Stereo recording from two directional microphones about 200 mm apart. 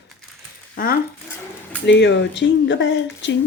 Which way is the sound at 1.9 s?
60° left (ahead or behind).